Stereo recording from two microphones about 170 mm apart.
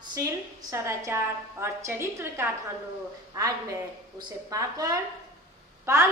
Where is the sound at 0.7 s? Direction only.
15° right (ahead or behind).